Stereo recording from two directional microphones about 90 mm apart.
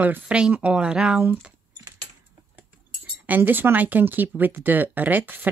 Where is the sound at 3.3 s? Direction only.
20° right (ahead or behind).